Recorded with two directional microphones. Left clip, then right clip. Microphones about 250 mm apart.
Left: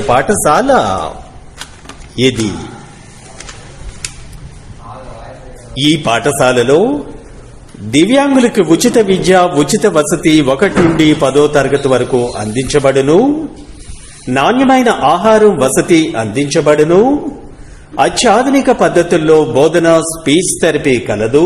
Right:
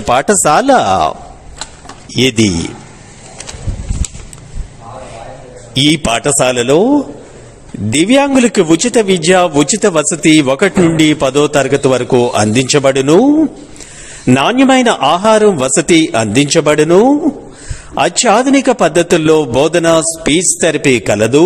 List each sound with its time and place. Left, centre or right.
0.1 s a man's voice: right
5.8 s a man's voice: right
7.9 s a man's voice: right